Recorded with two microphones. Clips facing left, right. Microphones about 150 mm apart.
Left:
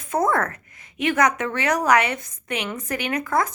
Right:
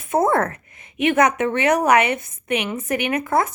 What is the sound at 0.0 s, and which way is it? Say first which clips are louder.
A woman's voice: right 3 dB; 25° right (ahead or behind).